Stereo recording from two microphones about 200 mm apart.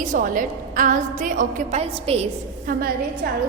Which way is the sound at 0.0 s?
40° right (ahead or behind).